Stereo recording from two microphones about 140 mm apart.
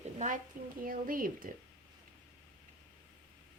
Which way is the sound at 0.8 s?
90° right.